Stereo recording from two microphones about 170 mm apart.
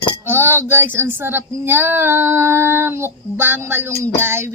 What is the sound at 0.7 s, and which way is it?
Speech, 15° right (ahead or behind).